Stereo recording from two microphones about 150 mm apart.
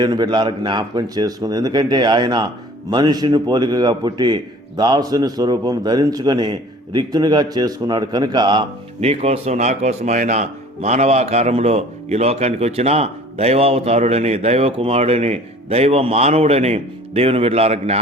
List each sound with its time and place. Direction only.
0.0 s a man's voice: 30° right (ahead or behind)
9.0 s speech: 45° right (ahead or behind)